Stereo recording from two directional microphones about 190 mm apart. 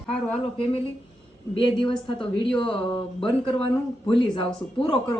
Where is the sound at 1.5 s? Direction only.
25° left (ahead or behind).